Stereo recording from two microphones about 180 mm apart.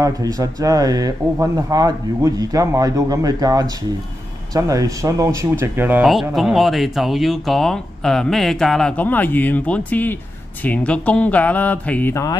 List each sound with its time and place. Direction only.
0.0 s speech: 20° right (ahead or behind); by 12.4 s 15° left (ahead or behind)